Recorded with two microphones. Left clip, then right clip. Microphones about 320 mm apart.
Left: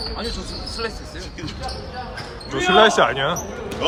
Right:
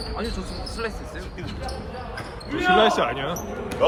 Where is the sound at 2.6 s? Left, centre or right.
Centre.